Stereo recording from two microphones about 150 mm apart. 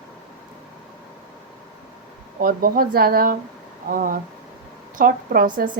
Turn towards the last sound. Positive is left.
turn(degrees=-65)  # may be behind; listen again after turning